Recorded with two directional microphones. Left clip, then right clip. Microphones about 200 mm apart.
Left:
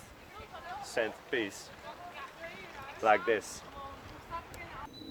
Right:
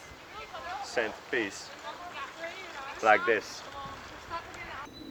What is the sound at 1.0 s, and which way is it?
Speech, 35° left (ahead or behind).